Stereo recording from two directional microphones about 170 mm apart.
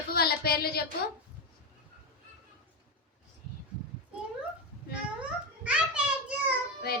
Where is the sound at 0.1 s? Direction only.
65° left (ahead or behind).